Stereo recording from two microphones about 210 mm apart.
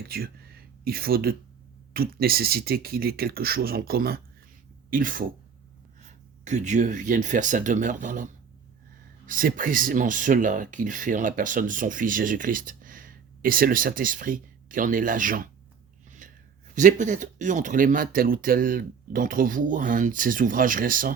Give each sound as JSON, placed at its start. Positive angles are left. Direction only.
{"t": 0.9, "sound": "speech", "side_deg": -45}
{"t": 16.2, "sound": "a sound", "side_deg": -40}
{"t": 16.7, "sound": "speech", "side_deg": -35}